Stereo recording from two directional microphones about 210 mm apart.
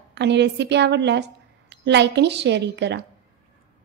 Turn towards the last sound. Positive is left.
turn(degrees=-55)  # may be behind; listen again after turning